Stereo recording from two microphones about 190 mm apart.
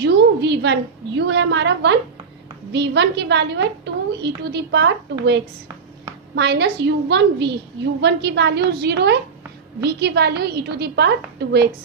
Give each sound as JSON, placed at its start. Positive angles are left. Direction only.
{"t": 0.0, "sound": "a woman's voice", "side_deg": -60}
{"t": 6.3, "sound": "a woman's voice", "side_deg": -65}